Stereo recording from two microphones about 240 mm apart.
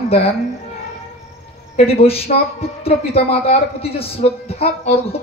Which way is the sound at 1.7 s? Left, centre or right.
Left.